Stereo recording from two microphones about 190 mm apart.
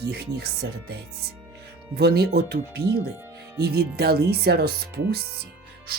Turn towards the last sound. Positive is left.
turn(degrees=-55)  # may be behind; listen again after turning